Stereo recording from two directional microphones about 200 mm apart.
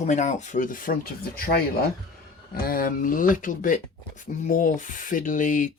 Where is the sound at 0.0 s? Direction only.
35° left (ahead or behind).